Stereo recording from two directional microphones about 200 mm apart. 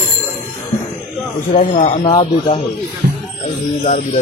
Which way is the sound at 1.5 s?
35° left (ahead or behind).